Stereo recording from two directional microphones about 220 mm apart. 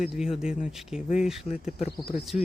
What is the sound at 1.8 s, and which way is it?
Speech, 25° left (ahead or behind).